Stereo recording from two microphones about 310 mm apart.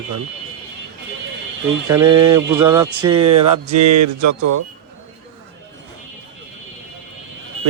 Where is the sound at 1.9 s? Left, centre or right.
Centre.